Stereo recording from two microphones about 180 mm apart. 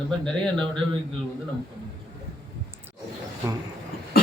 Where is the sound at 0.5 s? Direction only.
5° left (ahead or behind).